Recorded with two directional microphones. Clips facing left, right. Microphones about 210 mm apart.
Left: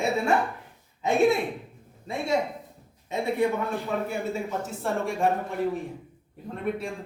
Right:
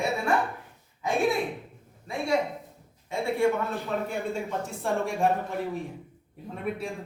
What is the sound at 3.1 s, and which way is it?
Speech, 20° left (ahead or behind).